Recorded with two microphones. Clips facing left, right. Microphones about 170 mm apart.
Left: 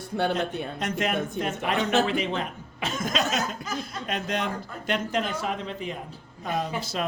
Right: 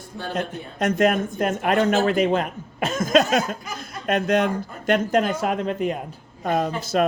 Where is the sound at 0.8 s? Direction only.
45° right (ahead or behind).